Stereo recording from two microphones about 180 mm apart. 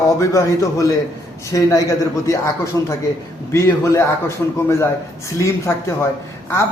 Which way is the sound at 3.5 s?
15° left (ahead or behind).